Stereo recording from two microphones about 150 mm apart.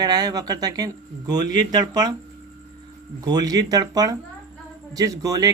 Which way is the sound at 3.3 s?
25° right (ahead or behind).